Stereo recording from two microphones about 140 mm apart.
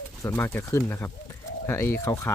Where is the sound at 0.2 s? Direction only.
20° left (ahead or behind).